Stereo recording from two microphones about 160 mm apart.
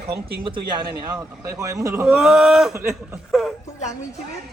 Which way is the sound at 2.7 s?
15° right (ahead or behind).